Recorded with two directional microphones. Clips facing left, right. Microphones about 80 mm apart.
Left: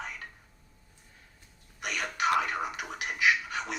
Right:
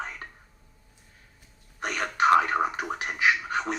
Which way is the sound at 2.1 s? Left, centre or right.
Right.